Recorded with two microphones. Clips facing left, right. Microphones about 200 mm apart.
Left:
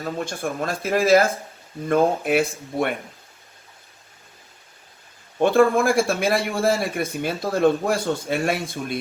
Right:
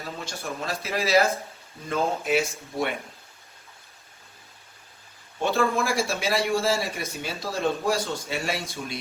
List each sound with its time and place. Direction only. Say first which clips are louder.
0.0 s a man's voice: left 8 dB; 50° left (ahead or behind)
5.4 s a man's voice: left 8 dB; 55° left (ahead or behind)